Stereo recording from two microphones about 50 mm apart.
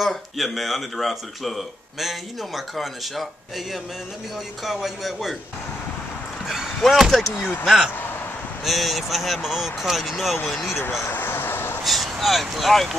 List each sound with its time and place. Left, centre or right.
0.0 s speech: centre
6.4 s basketball bounce: centre
7.6 s speech: centre
10.8 s speech: left
11.1 s vehicle: left
11.8 s speech: centre